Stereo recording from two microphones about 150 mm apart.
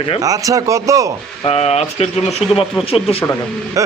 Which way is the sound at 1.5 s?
45° left (ahead or behind).